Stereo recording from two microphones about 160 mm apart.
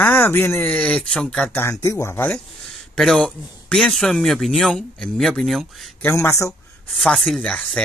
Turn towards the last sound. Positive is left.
turn(degrees=5)  # may be behind; listen again after turning